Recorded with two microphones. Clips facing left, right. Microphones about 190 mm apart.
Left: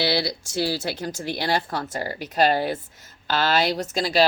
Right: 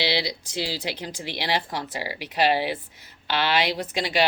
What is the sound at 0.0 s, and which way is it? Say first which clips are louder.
Speech: left 2 dB; 45° left (ahead or behind).